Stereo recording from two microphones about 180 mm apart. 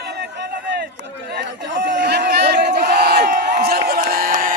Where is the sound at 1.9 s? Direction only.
60° right (ahead or behind).